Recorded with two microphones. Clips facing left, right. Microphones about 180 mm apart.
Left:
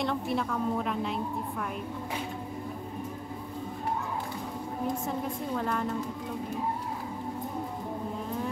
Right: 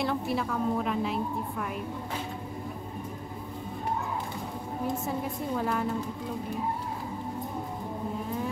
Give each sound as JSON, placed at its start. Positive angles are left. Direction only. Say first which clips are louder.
{"t": 0.0, "sound": "a woman's voice", "louder": "right 1 dB", "side_deg": -5}
{"t": 5.0, "sound": "a woman's voice", "louder": "right 1 dB", "side_deg": -5}